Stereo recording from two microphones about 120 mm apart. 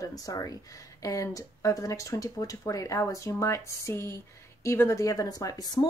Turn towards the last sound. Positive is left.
turn(degrees=35)  # may be behind; listen again after turning